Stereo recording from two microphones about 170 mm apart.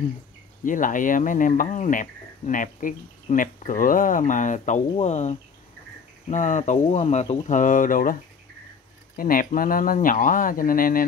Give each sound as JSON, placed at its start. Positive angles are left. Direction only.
{"t": 0.7, "sound": "speech", "side_deg": 50}